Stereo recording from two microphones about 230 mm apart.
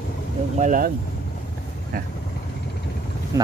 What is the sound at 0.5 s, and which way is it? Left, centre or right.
Speech, right.